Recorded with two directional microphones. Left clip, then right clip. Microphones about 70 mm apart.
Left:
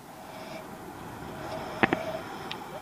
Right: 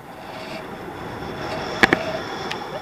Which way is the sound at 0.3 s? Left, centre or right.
Centre.